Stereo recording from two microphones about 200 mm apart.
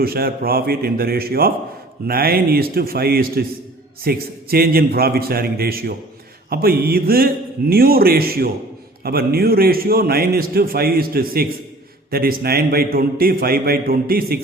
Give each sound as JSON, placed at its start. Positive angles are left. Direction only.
{"t": 0.0, "sound": "a man's voice", "side_deg": -50}